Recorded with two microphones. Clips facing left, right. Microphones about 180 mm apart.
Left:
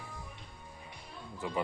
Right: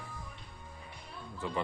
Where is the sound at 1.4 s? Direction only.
15° left (ahead or behind).